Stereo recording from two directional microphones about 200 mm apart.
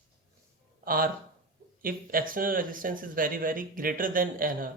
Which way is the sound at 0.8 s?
45° right (ahead or behind).